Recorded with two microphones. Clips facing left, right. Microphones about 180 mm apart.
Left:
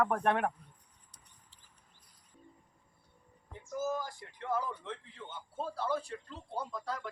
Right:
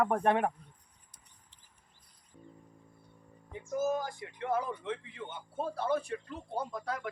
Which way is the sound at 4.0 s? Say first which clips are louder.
Right 4 dB; 55° right (ahead or behind).